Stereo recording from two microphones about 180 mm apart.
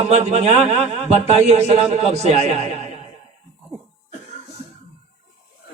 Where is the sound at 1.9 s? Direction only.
35° right (ahead or behind).